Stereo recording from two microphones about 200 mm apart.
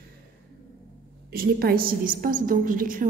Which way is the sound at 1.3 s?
50° right (ahead or behind).